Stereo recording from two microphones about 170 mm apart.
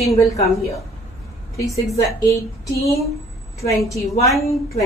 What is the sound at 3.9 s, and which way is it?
Speech, 20° left (ahead or behind).